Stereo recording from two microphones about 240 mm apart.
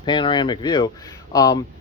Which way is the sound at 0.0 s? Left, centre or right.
Centre.